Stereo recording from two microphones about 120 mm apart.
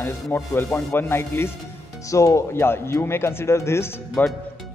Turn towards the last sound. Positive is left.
turn(degrees=20)  # may be behind; listen again after turning